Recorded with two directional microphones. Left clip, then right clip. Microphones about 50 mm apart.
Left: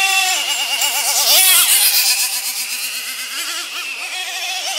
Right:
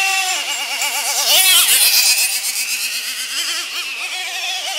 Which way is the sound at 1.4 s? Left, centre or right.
Centre.